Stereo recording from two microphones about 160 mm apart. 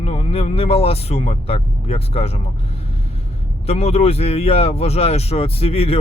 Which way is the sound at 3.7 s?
40° left (ahead or behind).